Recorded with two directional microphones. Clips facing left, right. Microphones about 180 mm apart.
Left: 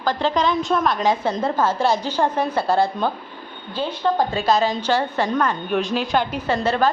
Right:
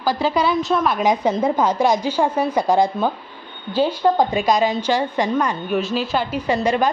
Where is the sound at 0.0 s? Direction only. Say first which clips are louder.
Right 1 dB; 10° right (ahead or behind).